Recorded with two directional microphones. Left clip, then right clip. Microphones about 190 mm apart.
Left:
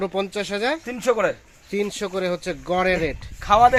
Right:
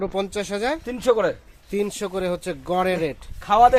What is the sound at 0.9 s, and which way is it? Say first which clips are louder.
Speech: right 3 dB; 50° right (ahead or behind).